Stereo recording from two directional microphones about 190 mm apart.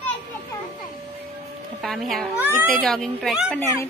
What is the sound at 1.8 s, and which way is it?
A woman's voice, centre (ahead or behind).